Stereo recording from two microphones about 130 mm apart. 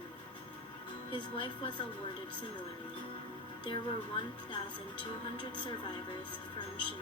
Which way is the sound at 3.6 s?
40° left (ahead or behind).